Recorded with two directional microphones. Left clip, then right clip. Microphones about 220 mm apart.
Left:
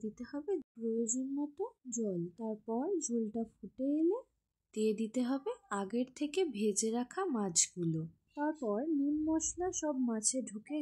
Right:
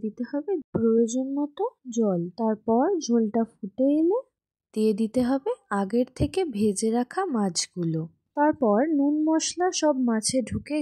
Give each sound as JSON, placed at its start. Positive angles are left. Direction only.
{"t": 0.0, "sound": "speech", "side_deg": -25}